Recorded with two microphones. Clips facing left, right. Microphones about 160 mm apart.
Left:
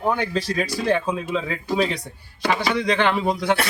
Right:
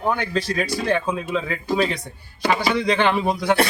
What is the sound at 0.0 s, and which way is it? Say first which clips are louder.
Speech: even; 10° left (ahead or behind).